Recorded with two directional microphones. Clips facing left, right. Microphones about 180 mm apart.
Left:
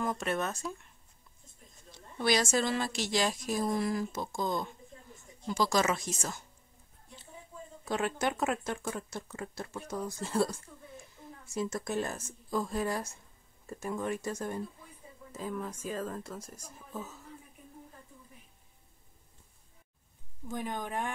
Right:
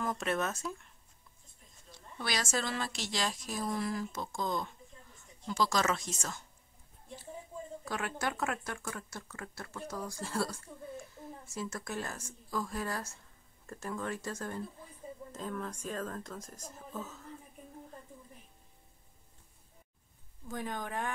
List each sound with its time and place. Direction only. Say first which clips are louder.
0.0 s speech: left 1 dB; centre (ahead or behind)
2.1 s a woman's voice: left 7 dB; 20° left (ahead or behind)
7.8 s speech: left 6 dB; 25° left (ahead or behind)
11.5 s a woman's voice: left 6 dB; 20° left (ahead or behind)
20.4 s a woman's voice: left 2 dB; 15° left (ahead or behind)